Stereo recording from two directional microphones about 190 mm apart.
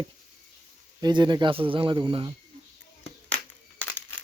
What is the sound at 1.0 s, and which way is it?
Speech, 25° right (ahead or behind).